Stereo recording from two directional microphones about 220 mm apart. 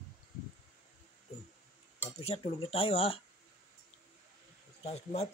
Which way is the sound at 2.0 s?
30° left (ahead or behind).